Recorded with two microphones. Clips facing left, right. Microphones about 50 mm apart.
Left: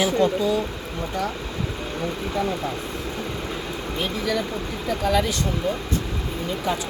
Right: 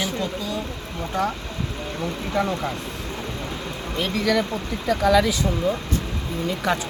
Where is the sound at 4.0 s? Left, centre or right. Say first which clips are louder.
Right 4 dB; right.